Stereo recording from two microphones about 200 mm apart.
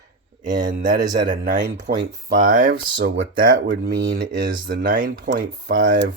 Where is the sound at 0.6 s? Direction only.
45° right (ahead or behind).